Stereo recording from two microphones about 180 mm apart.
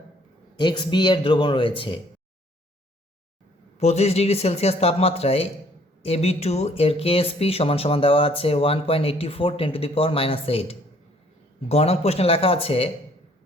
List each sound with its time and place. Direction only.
0.6 s speech: 25° left (ahead or behind)
3.8 s speech: 40° left (ahead or behind)